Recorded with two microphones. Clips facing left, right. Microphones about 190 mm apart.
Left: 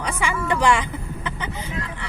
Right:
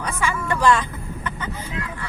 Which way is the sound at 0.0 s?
15° left (ahead or behind).